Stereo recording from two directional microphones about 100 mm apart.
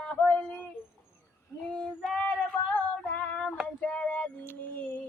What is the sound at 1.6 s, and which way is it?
Female singing, 10° left (ahead or behind).